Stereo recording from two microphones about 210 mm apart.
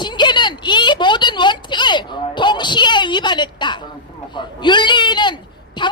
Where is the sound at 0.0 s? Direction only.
20° left (ahead or behind).